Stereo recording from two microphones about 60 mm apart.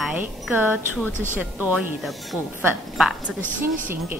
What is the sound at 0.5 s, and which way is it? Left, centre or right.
Music, right.